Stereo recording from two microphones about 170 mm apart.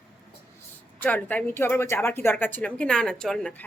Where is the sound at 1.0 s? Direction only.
10° left (ahead or behind).